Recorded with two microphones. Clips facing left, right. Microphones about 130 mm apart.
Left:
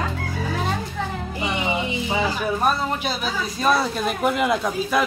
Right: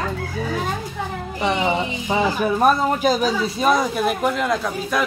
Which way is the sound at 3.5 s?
20° right (ahead or behind).